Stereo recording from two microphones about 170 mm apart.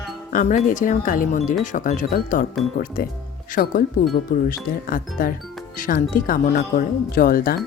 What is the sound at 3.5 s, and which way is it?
Speech, 55° left (ahead or behind).